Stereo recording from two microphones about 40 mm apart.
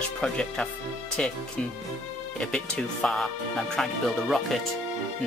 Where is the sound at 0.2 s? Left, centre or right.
Centre.